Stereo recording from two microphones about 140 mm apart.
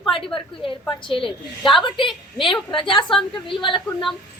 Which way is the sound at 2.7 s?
35° left (ahead or behind).